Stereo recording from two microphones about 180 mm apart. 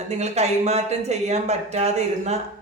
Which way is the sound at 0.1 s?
40° right (ahead or behind).